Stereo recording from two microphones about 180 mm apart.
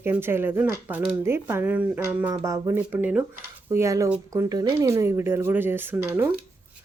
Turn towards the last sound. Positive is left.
turn(degrees=-10)  # may be behind; listen again after turning